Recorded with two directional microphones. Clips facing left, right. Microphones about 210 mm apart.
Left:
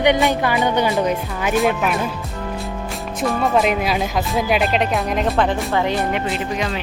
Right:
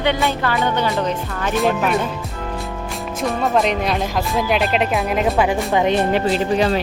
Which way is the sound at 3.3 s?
Centre (ahead or behind).